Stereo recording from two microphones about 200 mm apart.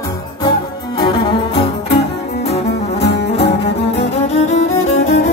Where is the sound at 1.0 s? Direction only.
20° left (ahead or behind).